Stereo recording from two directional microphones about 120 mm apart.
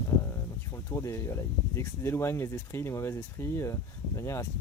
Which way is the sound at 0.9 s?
25° left (ahead or behind).